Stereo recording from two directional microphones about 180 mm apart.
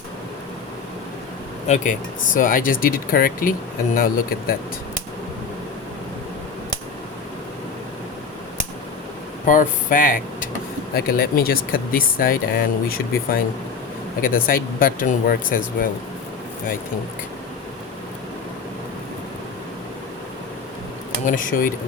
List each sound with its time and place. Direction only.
1.6 s speech: 45° left (ahead or behind)
9.5 s speech: 45° left (ahead or behind)
21.2 s speech: 50° left (ahead or behind)